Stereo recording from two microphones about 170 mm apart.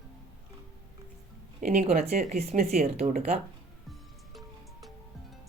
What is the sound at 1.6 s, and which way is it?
Speech, 45° right (ahead or behind).